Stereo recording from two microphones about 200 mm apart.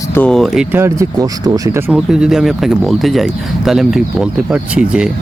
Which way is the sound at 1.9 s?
5° right (ahead or behind).